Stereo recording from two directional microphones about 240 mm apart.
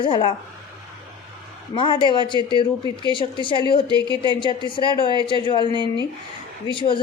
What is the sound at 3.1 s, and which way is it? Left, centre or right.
Speech, centre.